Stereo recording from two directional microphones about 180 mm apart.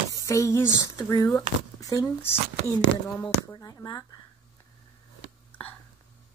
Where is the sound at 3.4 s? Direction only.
20° left (ahead or behind).